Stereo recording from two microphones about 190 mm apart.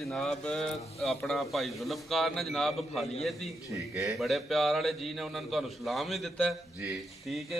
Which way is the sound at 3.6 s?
15° right (ahead or behind).